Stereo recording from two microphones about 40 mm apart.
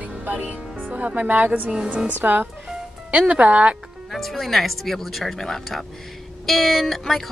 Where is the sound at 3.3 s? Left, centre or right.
Right.